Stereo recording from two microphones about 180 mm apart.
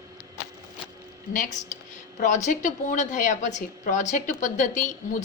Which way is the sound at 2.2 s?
40° left (ahead or behind).